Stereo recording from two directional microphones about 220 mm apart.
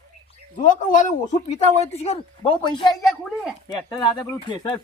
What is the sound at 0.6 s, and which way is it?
A woman's voice, 35° left (ahead or behind).